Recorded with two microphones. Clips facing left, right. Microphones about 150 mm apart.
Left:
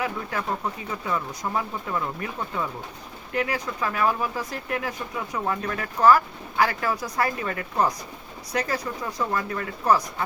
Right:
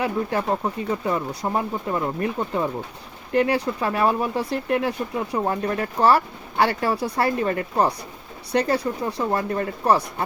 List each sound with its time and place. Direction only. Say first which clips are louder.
0.0 s speech: right 5 dB; 30° right (ahead or behind)